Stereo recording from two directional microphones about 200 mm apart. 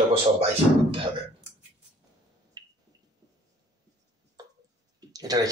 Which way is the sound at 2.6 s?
20° right (ahead or behind).